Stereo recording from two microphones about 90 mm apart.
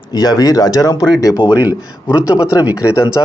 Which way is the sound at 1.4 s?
15° right (ahead or behind).